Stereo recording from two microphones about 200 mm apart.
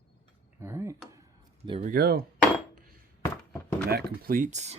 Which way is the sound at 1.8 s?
50° right (ahead or behind).